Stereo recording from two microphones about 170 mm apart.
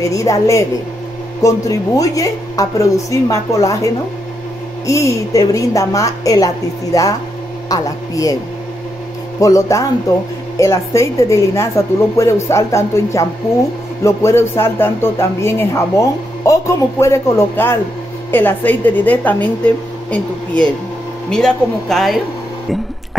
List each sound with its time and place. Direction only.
0.0 s a woman's voice: 20° left (ahead or behind)
9.4 s a woman's voice: 20° left (ahead or behind); by 22.2 s centre (ahead or behind)